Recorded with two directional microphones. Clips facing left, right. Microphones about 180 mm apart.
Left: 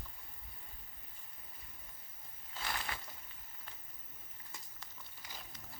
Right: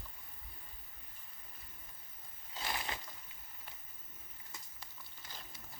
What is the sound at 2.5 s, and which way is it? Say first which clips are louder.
Crushing: right 1 dB; 15° right (ahead or behind).